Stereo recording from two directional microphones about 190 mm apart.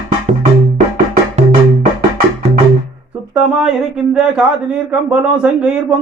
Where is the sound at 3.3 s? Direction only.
5° right (ahead or behind).